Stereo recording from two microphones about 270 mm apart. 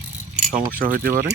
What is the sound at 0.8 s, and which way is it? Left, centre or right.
Mechanisms, right.